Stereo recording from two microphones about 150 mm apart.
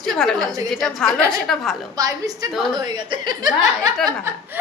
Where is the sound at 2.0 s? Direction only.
25° right (ahead or behind).